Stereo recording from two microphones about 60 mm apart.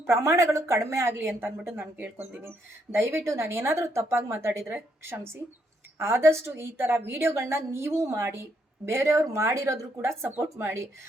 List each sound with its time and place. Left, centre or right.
0.0 s a woman's voice: right
10.2 s speech: right